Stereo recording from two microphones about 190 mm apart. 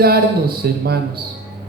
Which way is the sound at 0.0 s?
55° right (ahead or behind).